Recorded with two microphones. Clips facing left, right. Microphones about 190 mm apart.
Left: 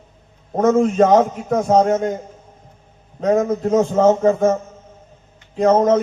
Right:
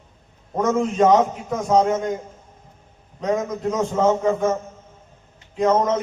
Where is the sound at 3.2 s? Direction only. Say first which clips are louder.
Left 6 dB; 50° left (ahead or behind).